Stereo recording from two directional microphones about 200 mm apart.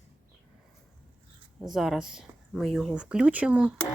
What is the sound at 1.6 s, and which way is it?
Speech, centre (ahead or behind).